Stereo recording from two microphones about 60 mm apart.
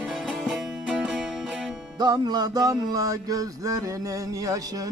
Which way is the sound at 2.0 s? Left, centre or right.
Right.